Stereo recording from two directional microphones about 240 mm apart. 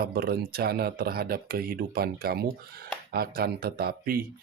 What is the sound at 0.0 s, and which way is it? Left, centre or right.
Speech, right.